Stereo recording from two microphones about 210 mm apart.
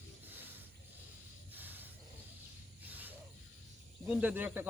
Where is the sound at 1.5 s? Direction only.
10° right (ahead or behind).